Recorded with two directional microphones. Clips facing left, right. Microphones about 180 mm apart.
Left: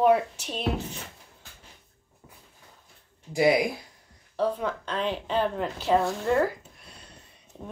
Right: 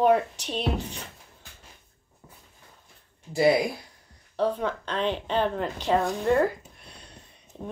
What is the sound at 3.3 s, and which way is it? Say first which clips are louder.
Speech: right 1 dB; 15° left (ahead or behind).